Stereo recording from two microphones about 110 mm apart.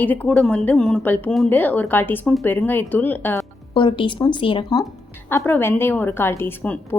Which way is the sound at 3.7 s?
50° left (ahead or behind).